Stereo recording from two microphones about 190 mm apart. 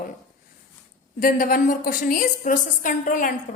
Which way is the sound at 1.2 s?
50° left (ahead or behind).